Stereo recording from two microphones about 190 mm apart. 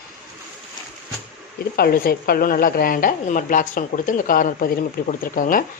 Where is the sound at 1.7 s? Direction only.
50° left (ahead or behind).